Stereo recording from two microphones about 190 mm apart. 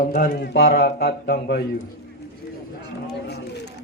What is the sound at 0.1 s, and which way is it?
Speech, 50° left (ahead or behind).